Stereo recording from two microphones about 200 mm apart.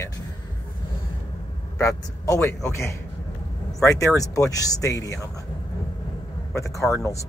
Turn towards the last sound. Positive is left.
turn(degrees=15)  # may be behind; listen again after turning